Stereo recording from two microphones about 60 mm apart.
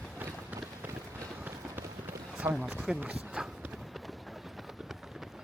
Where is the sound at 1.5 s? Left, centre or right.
Right.